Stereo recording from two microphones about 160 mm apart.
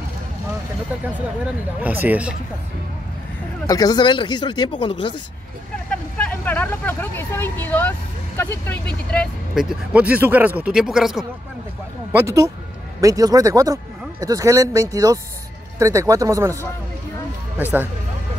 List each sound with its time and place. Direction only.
1.8 s speech: 10° right (ahead or behind)
3.6 s speech: 20° left (ahead or behind)
5.9 s speech: 5° left (ahead or behind)
12.1 s speech: 20° right (ahead or behind)
17.6 s speech: 10° right (ahead or behind)